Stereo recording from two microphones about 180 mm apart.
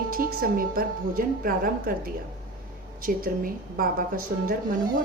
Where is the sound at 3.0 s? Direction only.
50° right (ahead or behind).